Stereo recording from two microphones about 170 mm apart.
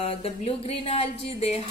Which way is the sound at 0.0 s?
35° left (ahead or behind).